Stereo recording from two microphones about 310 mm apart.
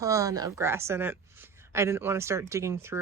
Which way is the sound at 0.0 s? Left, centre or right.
Centre.